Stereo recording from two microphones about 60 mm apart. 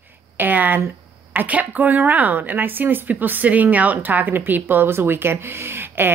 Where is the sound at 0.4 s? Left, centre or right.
Right.